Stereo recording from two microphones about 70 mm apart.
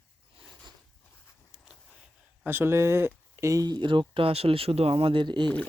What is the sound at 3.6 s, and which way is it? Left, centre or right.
Speech, right.